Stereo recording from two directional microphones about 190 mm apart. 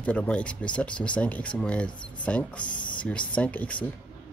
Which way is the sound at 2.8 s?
25° left (ahead or behind).